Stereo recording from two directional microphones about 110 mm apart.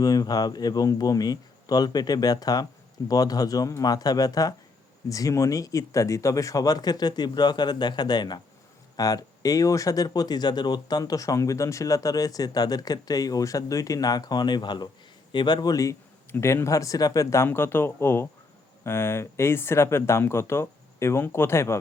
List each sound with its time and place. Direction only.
0.0 s speech: 35° left (ahead or behind)
16.3 s speech: 20° left (ahead or behind)